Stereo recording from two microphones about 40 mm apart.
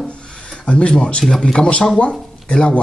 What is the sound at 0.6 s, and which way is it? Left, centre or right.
Speech, left.